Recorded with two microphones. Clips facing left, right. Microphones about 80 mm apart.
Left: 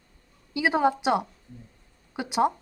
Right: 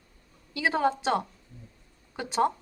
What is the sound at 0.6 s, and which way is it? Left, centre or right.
A woman's voice, centre.